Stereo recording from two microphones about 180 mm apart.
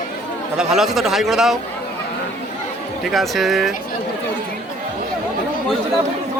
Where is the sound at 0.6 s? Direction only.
Centre (ahead or behind).